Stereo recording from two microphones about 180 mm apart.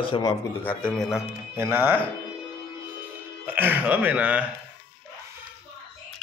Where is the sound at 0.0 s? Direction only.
25° left (ahead or behind).